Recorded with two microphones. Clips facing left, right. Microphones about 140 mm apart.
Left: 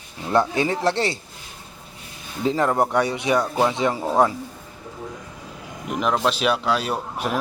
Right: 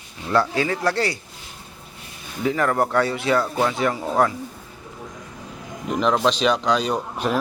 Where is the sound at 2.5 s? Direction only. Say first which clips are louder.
Left 1 dB; 20° left (ahead or behind).